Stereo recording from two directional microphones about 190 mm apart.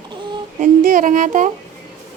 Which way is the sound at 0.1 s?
25° right (ahead or behind).